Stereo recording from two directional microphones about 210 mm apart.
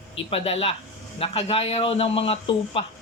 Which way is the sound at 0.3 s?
30° left (ahead or behind).